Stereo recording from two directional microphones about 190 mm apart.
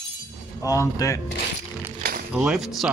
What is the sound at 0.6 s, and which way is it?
Speech, 15° left (ahead or behind).